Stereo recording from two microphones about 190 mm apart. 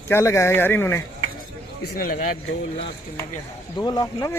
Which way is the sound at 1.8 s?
55° left (ahead or behind).